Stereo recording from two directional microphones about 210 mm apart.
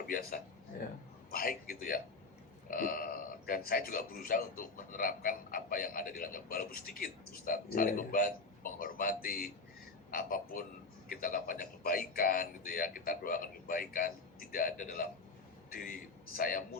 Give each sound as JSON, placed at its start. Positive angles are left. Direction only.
{"t": 0.1, "sound": "speech", "side_deg": 45}
{"t": 16.4, "sound": "speech", "side_deg": 40}